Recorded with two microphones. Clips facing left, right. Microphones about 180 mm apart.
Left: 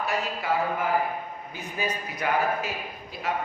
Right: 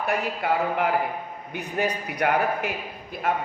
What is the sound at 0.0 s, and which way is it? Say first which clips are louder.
A man's voice: right 3 dB; 60° right (ahead or behind).